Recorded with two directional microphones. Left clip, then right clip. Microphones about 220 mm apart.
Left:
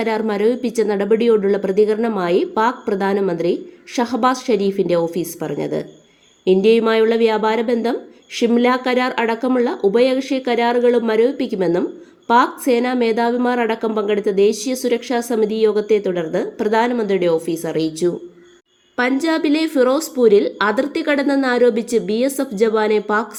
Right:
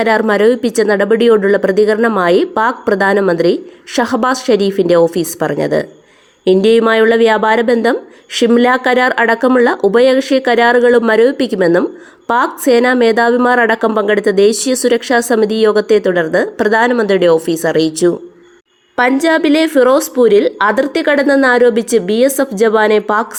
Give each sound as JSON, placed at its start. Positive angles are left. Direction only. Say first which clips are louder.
{"t": 0.0, "sound": "a woman's voice", "louder": "right 8 dB", "side_deg": -20}
{"t": 19.2, "sound": "a woman's voice", "louder": "right 7 dB", "side_deg": -15}